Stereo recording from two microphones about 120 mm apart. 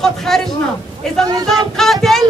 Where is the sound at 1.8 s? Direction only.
5° left (ahead or behind).